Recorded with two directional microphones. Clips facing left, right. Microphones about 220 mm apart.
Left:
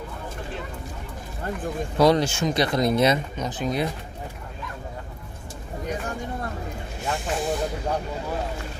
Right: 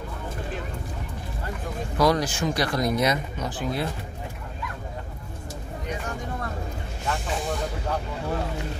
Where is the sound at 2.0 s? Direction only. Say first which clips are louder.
Left 3 dB; 25° left (ahead or behind).